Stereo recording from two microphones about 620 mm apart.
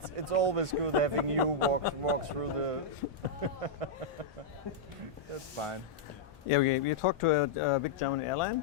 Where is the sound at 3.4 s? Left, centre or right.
Right.